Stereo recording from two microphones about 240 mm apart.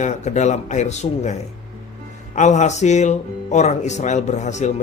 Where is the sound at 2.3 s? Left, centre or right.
Left.